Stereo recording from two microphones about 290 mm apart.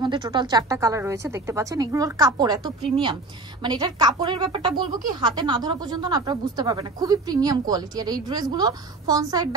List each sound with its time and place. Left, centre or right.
0.0 s speech: centre